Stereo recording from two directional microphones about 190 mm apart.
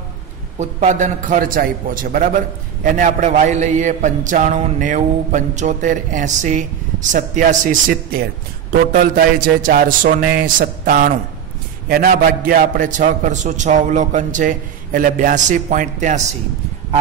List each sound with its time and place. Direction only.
0.6 s a man's voice: 40° right (ahead or behind)